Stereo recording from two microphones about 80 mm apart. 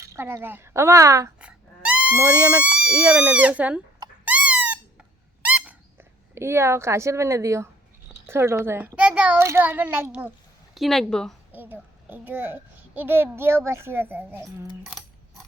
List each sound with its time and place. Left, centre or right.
0.4 s speech: right
1.4 s music: centre
2.1 s speech: right
2.9 s speech: right
4.3 s squeak: centre
6.0 s a woman's voice: right
9.0 s a child's voice: centre
9.4 s speech: right
10.8 s a woman's voice: centre
11.5 s a child's voice: right